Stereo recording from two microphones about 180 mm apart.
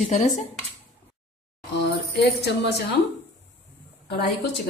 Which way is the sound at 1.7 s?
70° left (ahead or behind).